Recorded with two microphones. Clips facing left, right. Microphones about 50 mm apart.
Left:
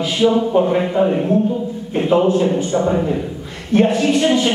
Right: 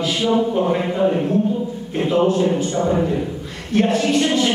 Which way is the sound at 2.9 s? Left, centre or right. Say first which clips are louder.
Even; centre.